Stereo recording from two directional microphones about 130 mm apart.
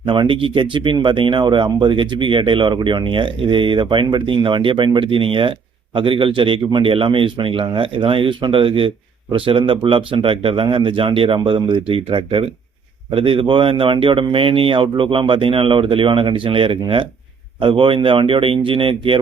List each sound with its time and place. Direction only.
0.0 s speech: 40° right (ahead or behind)